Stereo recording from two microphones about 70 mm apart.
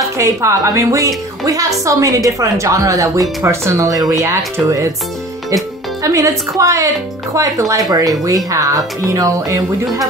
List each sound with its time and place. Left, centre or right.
0.2 s speech: right
6.0 s speech: right